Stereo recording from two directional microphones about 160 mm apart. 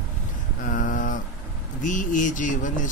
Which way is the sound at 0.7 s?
55° left (ahead or behind).